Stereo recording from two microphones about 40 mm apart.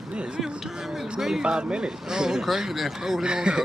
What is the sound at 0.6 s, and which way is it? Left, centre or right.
Speech, centre.